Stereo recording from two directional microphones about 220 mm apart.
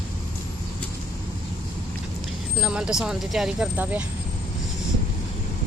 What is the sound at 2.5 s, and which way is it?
Speech, 5° right (ahead or behind).